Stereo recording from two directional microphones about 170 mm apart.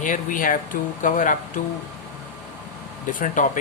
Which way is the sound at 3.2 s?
50° left (ahead or behind).